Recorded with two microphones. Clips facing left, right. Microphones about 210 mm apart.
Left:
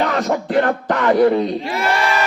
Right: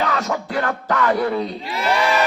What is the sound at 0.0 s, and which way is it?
Speech, 50° left (ahead or behind).